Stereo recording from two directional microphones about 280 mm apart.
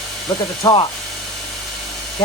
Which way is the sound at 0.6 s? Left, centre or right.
Centre.